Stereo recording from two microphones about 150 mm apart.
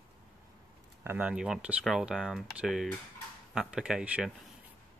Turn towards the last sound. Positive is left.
turn(degrees=-5)  # may be behind; listen again after turning